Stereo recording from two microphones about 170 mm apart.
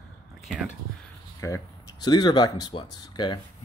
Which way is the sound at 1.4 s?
20° left (ahead or behind).